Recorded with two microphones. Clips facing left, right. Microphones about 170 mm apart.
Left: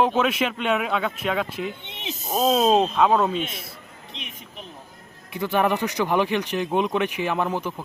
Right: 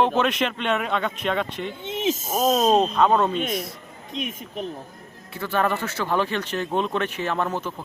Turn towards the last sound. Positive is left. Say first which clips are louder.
# left 1 dB
turn(degrees=10)  # may be behind; listen again after turning